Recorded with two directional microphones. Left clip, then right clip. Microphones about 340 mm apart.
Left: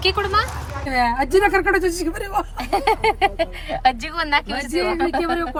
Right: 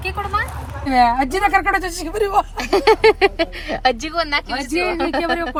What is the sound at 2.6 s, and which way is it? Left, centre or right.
Speech, right.